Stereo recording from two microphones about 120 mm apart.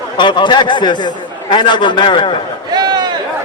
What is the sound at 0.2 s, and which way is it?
A man's voice, 40° left (ahead or behind).